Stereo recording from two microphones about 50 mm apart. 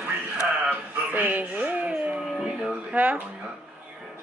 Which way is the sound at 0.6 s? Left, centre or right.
Right.